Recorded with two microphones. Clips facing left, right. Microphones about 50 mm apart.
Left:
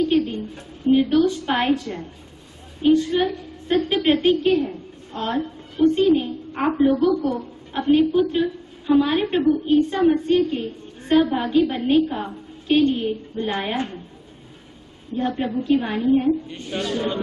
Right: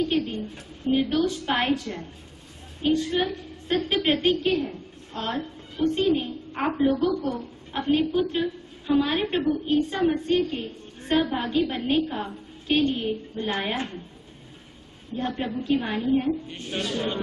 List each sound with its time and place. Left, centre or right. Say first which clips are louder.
0.8 s a woman's voice: left 6 dB; centre
7.1 s speech: left 5 dB; left
7.7 s a woman's voice: left 6 dB; centre
15.1 s a woman's voice: left 5 dB; centre